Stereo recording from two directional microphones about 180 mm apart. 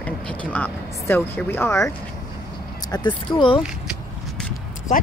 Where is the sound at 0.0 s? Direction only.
5° left (ahead or behind).